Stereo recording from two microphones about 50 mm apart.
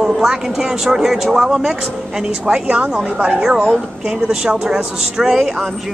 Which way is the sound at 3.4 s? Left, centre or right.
Centre.